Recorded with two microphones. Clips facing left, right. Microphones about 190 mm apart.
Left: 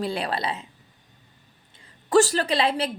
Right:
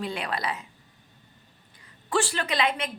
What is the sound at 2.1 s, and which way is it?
Speech, 40° left (ahead or behind).